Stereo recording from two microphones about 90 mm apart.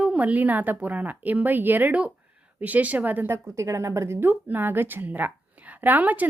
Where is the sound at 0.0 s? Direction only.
15° right (ahead or behind).